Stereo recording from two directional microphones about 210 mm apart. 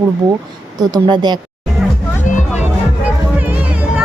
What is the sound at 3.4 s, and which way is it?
Music, 10° right (ahead or behind).